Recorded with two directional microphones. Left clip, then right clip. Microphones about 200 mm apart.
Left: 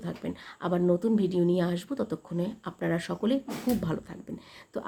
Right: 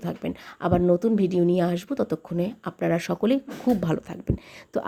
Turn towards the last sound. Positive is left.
turn(degrees=-35)  # may be behind; listen again after turning